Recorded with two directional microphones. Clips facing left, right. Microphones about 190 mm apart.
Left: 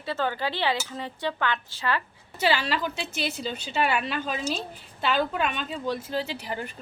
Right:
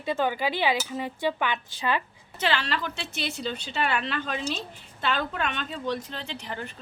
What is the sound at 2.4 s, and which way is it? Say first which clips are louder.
A woman's voice: left 3 dB; 10° left (ahead or behind).